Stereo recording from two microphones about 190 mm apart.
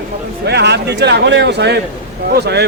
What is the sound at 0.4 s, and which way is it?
Speech, 60° right (ahead or behind).